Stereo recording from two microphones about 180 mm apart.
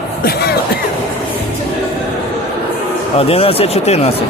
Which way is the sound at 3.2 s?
35° left (ahead or behind).